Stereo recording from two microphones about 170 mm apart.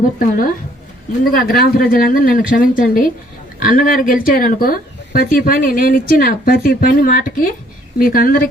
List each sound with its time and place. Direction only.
1.2 s speech: 60° left (ahead or behind)